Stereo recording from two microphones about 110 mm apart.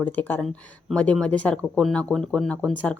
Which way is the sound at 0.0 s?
15° left (ahead or behind).